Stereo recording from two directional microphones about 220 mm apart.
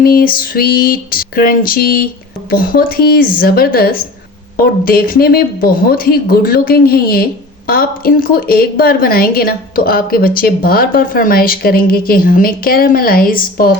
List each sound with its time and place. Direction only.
0.0 s speech: 40° left (ahead or behind)